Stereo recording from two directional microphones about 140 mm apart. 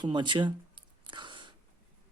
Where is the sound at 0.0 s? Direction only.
35° right (ahead or behind).